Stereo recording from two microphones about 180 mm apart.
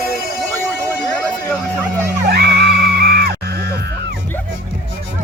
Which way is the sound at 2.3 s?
65° right (ahead or behind).